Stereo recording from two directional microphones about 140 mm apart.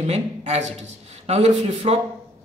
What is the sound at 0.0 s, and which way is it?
Speech, 50° right (ahead or behind).